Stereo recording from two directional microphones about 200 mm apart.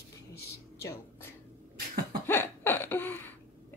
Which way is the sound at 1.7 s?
45° right (ahead or behind).